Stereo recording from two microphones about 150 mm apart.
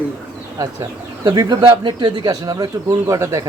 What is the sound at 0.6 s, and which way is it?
Speech, 25° right (ahead or behind).